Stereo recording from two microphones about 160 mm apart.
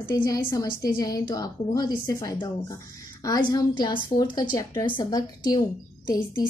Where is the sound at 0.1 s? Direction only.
20° left (ahead or behind).